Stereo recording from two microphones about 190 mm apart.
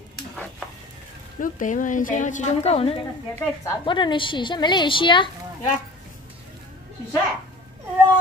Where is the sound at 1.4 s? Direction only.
45° left (ahead or behind); by 5.3 s 25° left (ahead or behind).